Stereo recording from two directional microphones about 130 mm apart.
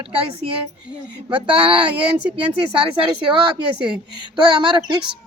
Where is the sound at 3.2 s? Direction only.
40° right (ahead or behind).